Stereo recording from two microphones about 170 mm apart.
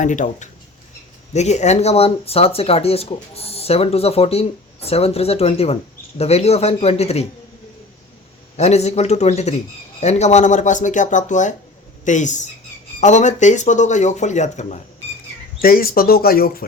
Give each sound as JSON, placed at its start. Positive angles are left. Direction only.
{"t": 0.0, "sound": "speech", "side_deg": 45}
{"t": 8.5, "sound": "speech", "side_deg": 40}
{"t": 15.6, "sound": "speech", "side_deg": 60}